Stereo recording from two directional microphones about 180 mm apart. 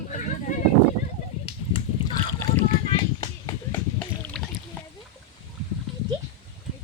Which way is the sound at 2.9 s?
25° left (ahead or behind).